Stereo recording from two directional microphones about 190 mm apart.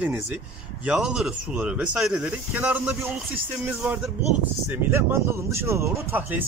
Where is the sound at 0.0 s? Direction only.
5° right (ahead or behind).